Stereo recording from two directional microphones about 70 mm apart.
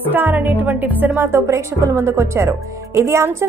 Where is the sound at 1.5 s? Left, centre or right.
Right.